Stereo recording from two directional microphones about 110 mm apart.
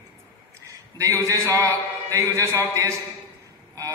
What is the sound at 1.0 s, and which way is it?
A man's voice, 30° right (ahead or behind).